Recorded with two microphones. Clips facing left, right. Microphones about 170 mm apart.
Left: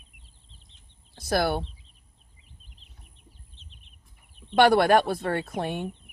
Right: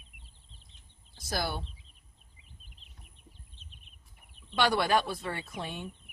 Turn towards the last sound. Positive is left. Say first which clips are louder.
# left 9 dB
turn(degrees=55)  # may be behind; listen again after turning